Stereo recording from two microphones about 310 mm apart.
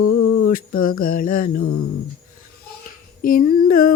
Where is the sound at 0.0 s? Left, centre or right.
Left.